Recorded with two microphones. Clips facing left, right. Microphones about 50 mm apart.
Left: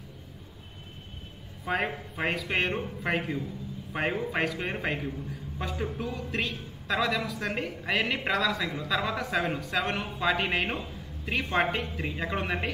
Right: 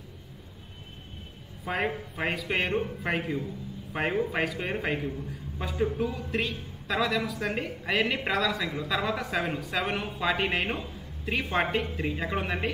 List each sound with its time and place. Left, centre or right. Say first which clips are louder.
1.6 s a man's voice: even; centre